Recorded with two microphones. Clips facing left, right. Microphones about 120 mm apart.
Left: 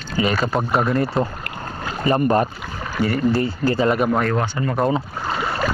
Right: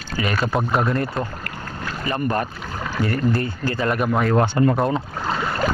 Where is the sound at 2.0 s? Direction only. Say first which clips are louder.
Left 6 dB; 25° left (ahead or behind).